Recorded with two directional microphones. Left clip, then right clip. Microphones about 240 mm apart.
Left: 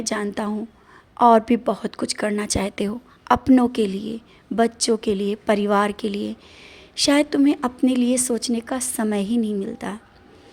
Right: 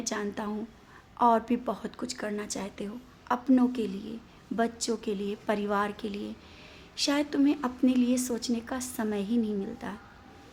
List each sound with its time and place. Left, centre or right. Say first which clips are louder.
0.0 s a woman's voice: left 8 dB; left